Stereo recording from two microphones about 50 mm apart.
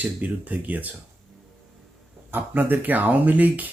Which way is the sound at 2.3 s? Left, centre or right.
Right.